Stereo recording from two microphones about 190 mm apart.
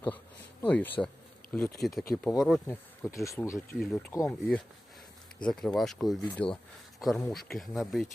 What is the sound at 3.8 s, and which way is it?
Speech, 5° left (ahead or behind).